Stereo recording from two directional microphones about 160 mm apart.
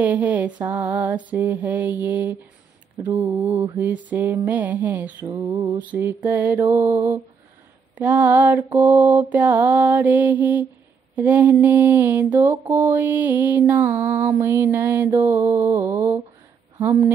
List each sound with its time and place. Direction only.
0.0 s mantra: 10° right (ahead or behind)
5.2 s mantra: 25° right (ahead or behind)
5.8 s mantra: 10° right (ahead or behind)